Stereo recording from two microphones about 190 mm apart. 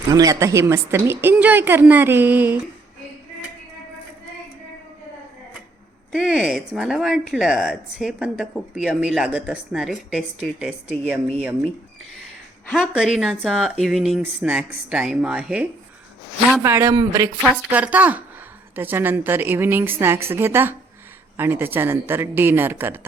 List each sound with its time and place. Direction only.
0.1 s a woman's voice: 20° right (ahead or behind)
6.1 s speech: 5° right (ahead or behind)
12.7 s speech: 5° right (ahead or behind)
16.6 s a woman's voice: 15° right (ahead or behind)
17.4 s a woman's voice: 5° right (ahead or behind)